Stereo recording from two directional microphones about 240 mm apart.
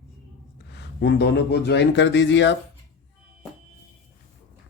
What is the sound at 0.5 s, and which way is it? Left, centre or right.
Speech, left.